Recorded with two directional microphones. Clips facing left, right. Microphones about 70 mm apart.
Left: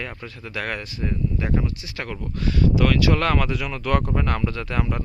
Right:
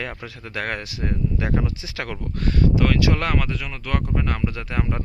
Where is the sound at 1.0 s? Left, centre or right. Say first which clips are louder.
Even; right.